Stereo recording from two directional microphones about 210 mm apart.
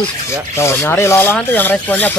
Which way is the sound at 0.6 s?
10° left (ahead or behind).